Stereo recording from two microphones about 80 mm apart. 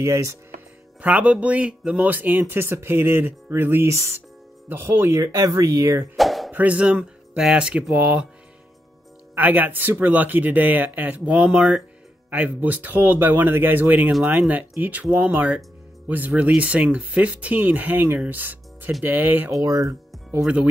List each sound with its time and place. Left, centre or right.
0.0 s speech: right
1.0 s speech: centre; by 6.0 s right
6.1 s a sound: centre
6.5 s speech: centre
9.3 s speech: right
12.3 s speech: right
19.5 s speech: right